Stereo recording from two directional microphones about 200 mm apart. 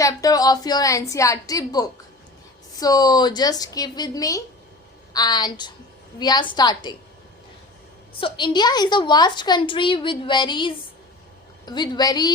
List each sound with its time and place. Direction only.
0.0 s a woman's voice: 15° left (ahead or behind)
8.2 s a woman's voice: 25° left (ahead or behind)